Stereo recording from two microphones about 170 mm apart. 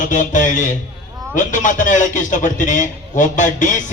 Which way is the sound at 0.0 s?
50° left (ahead or behind).